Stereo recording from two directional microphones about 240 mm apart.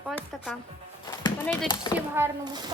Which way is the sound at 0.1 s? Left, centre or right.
Centre.